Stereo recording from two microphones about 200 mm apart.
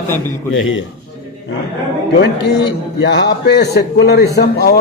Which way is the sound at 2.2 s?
60° left (ahead or behind).